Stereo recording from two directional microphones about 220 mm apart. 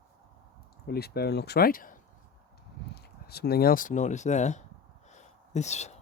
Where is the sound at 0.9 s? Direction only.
45° left (ahead or behind).